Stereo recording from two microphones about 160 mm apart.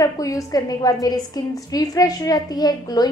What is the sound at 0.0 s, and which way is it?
A woman's voice, 20° left (ahead or behind).